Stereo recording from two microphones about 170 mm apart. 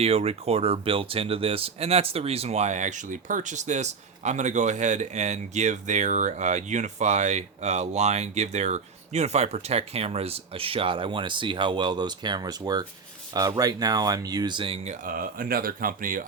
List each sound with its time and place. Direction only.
0.0 s speech: 35° right (ahead or behind)
15.0 s speech: 55° right (ahead or behind)